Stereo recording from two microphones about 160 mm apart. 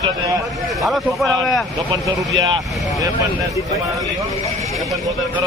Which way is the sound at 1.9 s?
20° right (ahead or behind).